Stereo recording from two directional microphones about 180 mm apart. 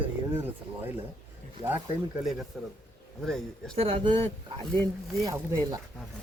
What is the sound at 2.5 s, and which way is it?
Speech, 5° right (ahead or behind).